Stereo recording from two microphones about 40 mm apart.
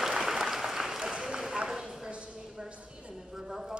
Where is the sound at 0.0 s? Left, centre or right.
Centre.